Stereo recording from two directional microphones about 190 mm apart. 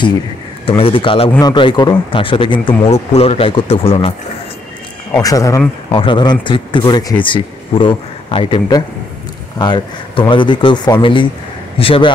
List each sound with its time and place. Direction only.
0.7 s speech: 30° left (ahead or behind)
5.2 s speech: 15° left (ahead or behind)